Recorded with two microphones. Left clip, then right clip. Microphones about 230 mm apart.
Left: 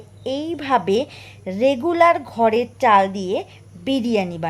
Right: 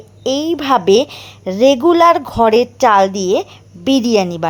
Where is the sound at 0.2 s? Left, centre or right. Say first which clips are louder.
Right 8 dB; right.